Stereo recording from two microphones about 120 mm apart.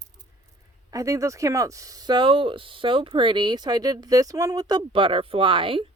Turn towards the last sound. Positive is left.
turn(degrees=-45)  # may be behind; listen again after turning